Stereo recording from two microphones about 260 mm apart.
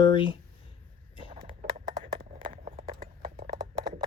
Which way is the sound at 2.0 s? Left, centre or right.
Right.